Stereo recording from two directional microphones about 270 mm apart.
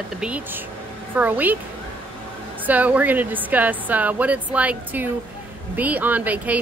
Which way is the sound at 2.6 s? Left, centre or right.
Centre.